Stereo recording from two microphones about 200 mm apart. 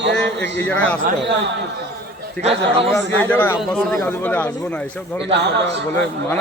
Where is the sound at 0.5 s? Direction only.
5° left (ahead or behind).